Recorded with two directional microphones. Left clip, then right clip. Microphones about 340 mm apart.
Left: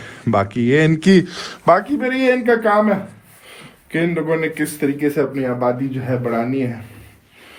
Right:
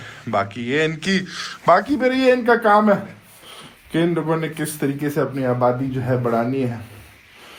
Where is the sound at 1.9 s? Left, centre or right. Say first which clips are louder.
Even; centre.